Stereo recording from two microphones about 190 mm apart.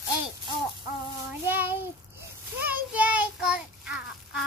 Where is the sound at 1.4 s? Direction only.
10° right (ahead or behind).